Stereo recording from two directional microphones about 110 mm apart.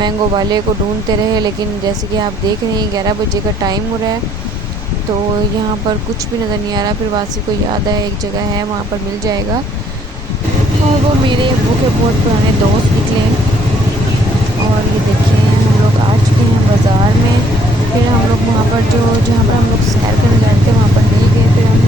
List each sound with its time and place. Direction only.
0.0 s speech: 40° right (ahead or behind)